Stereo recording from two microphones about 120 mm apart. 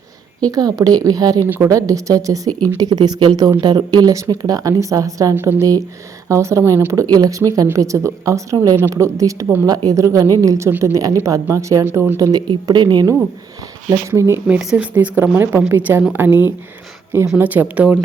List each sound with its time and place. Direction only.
0.4 s speech: 30° right (ahead or behind)
1.5 s a woman's voice: 15° right (ahead or behind)
1.7 s speech: 30° right (ahead or behind)
14.1 s speech: 20° right (ahead or behind)
14.4 s a woman's voice: 5° right (ahead or behind)